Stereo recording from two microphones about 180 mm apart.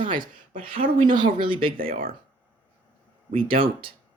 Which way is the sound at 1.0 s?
25° right (ahead or behind).